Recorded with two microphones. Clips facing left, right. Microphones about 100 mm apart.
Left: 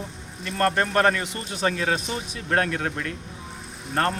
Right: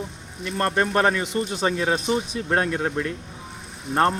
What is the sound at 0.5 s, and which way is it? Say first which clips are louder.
Speech: even; 15° right (ahead or behind).